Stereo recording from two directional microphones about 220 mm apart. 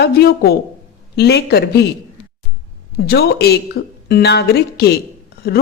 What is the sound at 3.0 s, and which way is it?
A woman's voice, 45° left (ahead or behind).